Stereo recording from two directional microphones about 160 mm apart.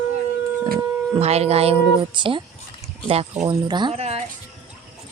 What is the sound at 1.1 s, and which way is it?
Speech, 40° right (ahead or behind).